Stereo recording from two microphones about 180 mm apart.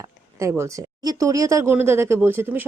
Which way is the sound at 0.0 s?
15° right (ahead or behind).